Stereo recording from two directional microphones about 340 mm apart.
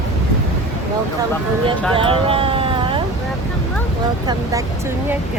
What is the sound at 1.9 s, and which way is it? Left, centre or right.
Vehicle, centre.